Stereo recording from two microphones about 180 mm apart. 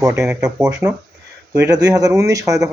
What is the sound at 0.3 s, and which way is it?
Speech, 5° right (ahead or behind).